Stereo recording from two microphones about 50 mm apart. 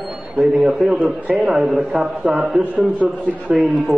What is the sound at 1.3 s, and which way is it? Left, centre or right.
A man's voice, centre.